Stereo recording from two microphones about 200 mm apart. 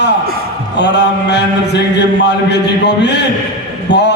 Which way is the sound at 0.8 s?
60° left (ahead or behind).